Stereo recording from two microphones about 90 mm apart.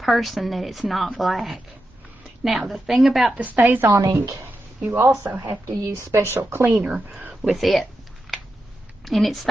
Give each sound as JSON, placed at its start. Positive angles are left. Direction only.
{"t": 0.0, "sound": "a woman's voice", "side_deg": 0}
{"t": 3.3, "sound": "a woman's voice", "side_deg": -15}
{"t": 3.9, "sound": "a woman's voice", "side_deg": -40}
{"t": 6.8, "sound": "speech", "side_deg": -10}
{"t": 7.5, "sound": "a woman's voice", "side_deg": 0}
{"t": 9.0, "sound": "a woman's voice", "side_deg": 0}